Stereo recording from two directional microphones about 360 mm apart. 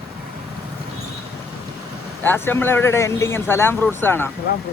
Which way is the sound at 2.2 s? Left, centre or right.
Centre.